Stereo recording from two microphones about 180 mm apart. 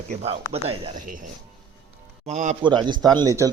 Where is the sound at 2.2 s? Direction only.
40° right (ahead or behind).